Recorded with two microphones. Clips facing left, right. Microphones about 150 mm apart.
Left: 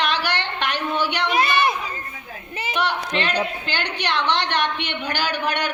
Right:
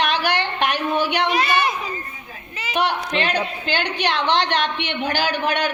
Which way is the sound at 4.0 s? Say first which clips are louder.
Right 2 dB; 20° right (ahead or behind).